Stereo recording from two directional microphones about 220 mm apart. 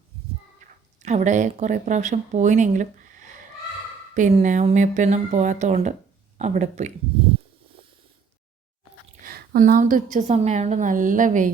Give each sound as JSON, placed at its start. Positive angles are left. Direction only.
{"t": 1.0, "sound": "a woman's voice", "side_deg": -30}
{"t": 9.2, "sound": "a woman's voice", "side_deg": -40}